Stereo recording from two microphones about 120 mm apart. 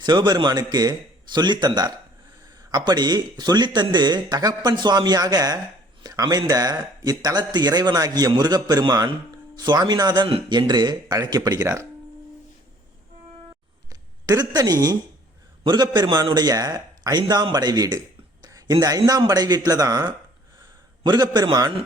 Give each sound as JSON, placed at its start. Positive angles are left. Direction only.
{"t": 0.0, "sound": "speech", "side_deg": -40}
{"t": 14.3, "sound": "speech", "side_deg": -30}